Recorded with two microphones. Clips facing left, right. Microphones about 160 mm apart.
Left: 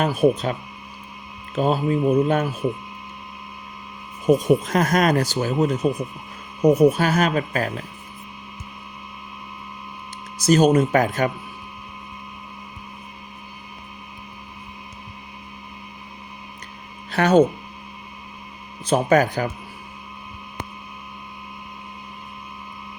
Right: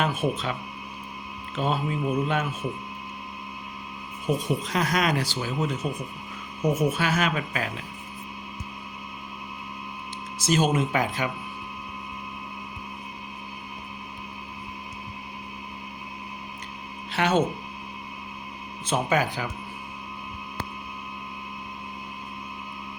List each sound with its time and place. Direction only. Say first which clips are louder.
0.0 s speech: left 7 dB; 40° left (ahead or behind)
1.5 s speech: left 7 dB; 40° left (ahead or behind)
4.3 s speech: left 9 dB; 45° left (ahead or behind)
10.4 s speech: left 7 dB; 40° left (ahead or behind)
17.1 s speech: left 7 dB; 40° left (ahead or behind)
18.9 s speech: left 7 dB; 40° left (ahead or behind)